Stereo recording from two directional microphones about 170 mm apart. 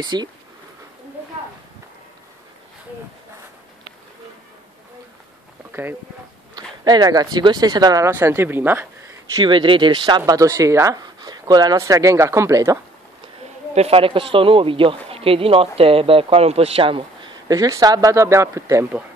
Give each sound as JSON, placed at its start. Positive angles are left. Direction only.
{"t": 0.0, "sound": "speech", "side_deg": -25}
{"t": 5.7, "sound": "speech", "side_deg": -10}
{"t": 6.5, "sound": "speech", "side_deg": -25}
{"t": 9.4, "sound": "speech", "side_deg": -30}
{"t": 13.7, "sound": "speech", "side_deg": -35}